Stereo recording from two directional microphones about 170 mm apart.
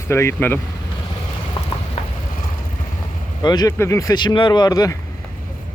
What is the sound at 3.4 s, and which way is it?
Speech, 25° left (ahead or behind).